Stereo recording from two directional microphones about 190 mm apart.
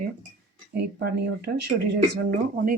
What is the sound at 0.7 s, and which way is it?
Speech, 60° right (ahead or behind).